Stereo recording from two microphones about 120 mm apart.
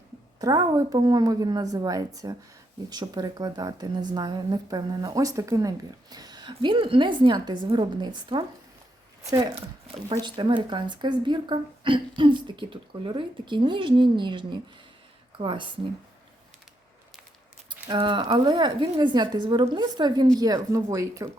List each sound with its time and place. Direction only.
0.3 s speech: 35° right (ahead or behind)
10.1 s speech: 40° right (ahead or behind)
17.8 s speech: 40° right (ahead or behind); by 21.2 s 25° right (ahead or behind)